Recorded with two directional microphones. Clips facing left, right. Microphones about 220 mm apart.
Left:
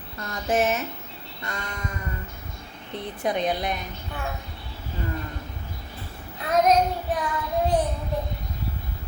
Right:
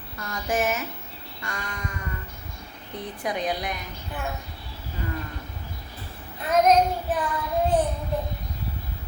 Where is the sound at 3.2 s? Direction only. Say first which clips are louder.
Left 3 dB; 25° left (ahead or behind).